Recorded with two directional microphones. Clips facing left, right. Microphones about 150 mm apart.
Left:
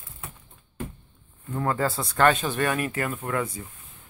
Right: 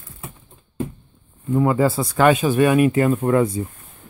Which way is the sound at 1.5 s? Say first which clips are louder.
Right 9 dB; 10° right (ahead or behind).